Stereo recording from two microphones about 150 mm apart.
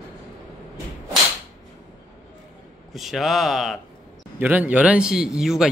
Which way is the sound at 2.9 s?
Centre (ahead or behind).